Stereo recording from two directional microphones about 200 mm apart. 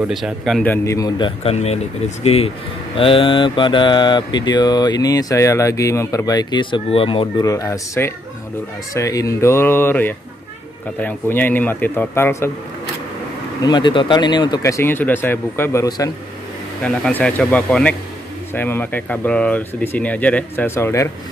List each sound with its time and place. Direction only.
0.0 s mantra: centre (ahead or behind)
8.9 s speech: 15° left (ahead or behind)
13.7 s speech: 20° left (ahead or behind)
16.8 s speech: 5° left (ahead or behind)